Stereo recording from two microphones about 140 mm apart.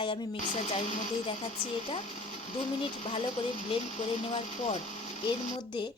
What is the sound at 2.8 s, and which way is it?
Speech, 45° left (ahead or behind).